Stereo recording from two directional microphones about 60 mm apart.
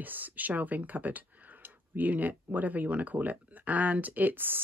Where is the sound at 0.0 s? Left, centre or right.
Right.